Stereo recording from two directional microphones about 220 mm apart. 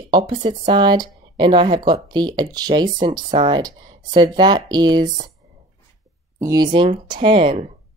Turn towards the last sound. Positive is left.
turn(degrees=-25)  # may be behind; listen again after turning